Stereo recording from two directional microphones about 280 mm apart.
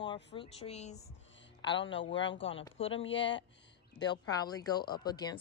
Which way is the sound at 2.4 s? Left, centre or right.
Centre.